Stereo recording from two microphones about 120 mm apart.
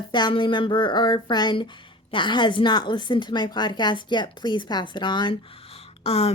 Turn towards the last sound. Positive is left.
turn(degrees=55)  # may be behind; listen again after turning